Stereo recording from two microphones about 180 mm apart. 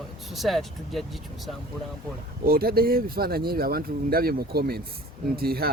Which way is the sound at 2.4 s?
55° right (ahead or behind).